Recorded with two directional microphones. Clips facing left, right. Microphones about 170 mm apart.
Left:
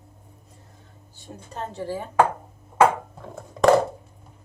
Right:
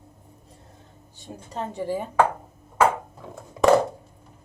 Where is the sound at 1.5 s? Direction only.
15° right (ahead or behind).